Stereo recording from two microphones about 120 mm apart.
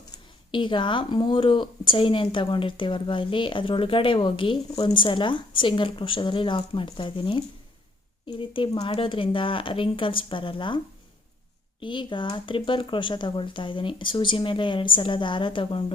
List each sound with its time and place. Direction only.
0.1 s speech: 40° left (ahead or behind)
11.8 s speech: 40° left (ahead or behind)